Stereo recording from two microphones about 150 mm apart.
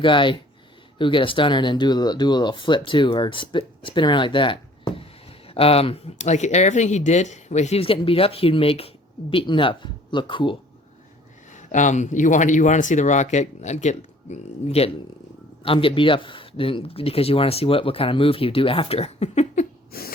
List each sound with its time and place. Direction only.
0.0 s speech: 35° left (ahead or behind)
11.5 s speech: 55° left (ahead or behind)
19.9 s a sound: 90° left